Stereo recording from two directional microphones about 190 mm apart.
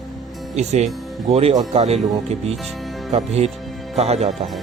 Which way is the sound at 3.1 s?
35° right (ahead or behind).